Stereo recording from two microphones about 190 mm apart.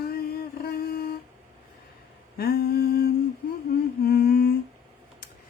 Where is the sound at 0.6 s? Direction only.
55° left (ahead or behind).